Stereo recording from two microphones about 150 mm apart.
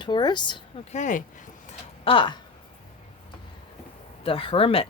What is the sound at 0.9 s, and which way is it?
Speech, 55° left (ahead or behind).